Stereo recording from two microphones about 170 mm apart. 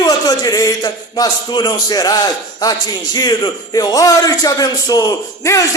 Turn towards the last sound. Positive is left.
turn(degrees=20)  # may be behind; listen again after turning